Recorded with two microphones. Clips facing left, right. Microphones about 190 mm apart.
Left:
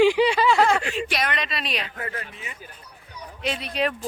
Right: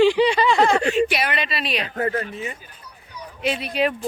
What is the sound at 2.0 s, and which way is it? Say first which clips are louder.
Speech: right 10 dB; 40° right (ahead or behind).